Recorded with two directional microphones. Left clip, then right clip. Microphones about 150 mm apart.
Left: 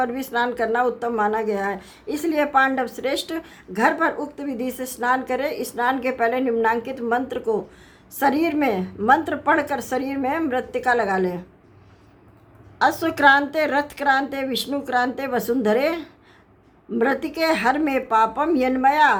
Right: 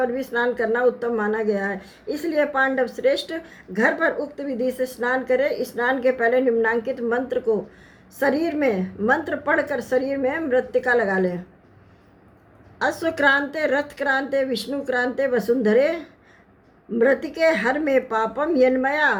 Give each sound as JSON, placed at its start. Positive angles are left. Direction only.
{"t": 0.0, "sound": "a woman's voice", "side_deg": 25}
{"t": 12.8, "sound": "a woman's voice", "side_deg": 25}